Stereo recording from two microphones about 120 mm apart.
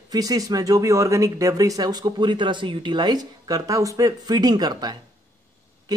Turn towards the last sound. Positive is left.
turn(degrees=-35)  # may be behind; listen again after turning